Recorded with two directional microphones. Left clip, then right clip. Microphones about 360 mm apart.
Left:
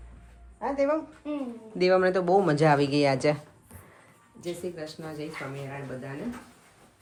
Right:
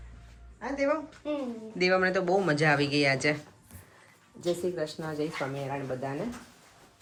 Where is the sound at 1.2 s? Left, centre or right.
Right.